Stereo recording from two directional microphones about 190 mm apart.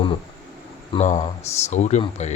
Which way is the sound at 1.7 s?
40° left (ahead or behind).